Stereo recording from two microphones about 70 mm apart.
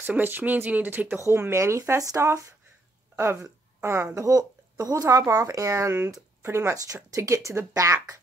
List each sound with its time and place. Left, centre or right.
0.0 s speech: right
1.2 s speech: right
3.2 s a woman's voice: right
5.3 s speech: right